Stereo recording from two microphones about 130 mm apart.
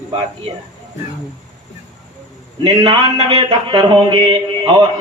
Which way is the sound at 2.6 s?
40° right (ahead or behind).